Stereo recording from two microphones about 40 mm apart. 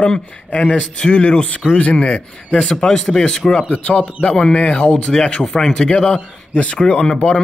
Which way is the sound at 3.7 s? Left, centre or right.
Left.